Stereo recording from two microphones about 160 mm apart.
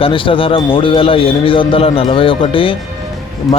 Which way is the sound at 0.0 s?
35° left (ahead or behind).